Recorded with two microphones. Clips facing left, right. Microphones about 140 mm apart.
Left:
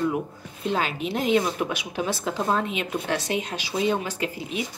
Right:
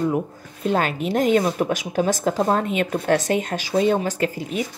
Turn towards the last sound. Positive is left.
turn(degrees=-45)  # may be behind; listen again after turning